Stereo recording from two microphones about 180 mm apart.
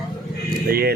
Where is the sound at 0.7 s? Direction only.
55° right (ahead or behind).